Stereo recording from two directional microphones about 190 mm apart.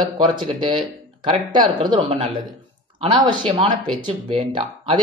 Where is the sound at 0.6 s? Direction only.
25° right (ahead or behind).